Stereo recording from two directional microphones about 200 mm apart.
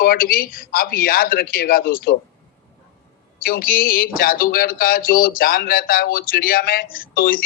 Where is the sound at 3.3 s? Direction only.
45° left (ahead or behind).